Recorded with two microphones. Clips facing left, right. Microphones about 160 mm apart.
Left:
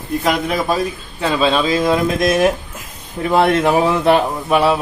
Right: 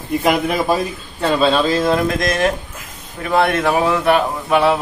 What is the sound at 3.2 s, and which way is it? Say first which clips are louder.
A man's voice: left 2 dB; 20° left (ahead or behind).